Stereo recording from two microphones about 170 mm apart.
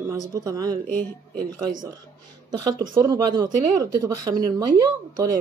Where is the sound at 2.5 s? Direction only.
25° right (ahead or behind).